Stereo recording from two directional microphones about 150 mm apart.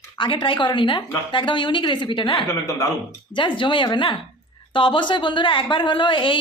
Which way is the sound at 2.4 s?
20° left (ahead or behind).